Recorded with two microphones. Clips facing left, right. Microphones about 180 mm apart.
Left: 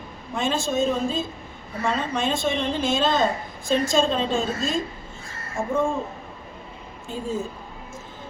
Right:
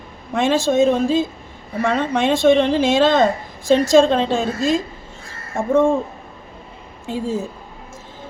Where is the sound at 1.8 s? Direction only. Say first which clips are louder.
Right 6 dB; 75° right (ahead or behind).